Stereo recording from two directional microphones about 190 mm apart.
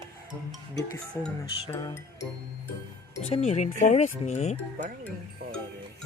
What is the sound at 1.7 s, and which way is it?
Speech, 15° left (ahead or behind).